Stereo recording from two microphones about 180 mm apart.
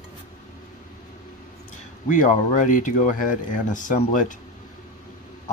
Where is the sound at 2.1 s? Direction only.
45° left (ahead or behind).